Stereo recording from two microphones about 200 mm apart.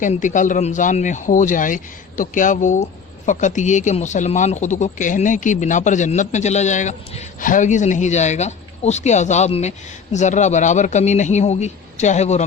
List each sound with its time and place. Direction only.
0.0 s speech: 40° left (ahead or behind)